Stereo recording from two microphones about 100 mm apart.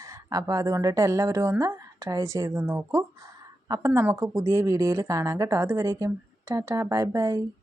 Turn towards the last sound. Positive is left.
turn(degrees=-30)  # may be behind; listen again after turning